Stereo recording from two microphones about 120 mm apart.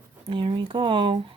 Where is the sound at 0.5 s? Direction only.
45° right (ahead or behind).